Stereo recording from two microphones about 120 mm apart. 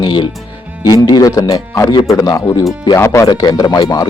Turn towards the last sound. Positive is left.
turn(degrees=30)  # may be behind; listen again after turning